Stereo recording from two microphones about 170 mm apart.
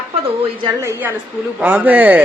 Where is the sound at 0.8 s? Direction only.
15° right (ahead or behind).